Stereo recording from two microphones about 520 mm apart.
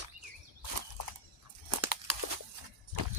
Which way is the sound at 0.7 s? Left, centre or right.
Right.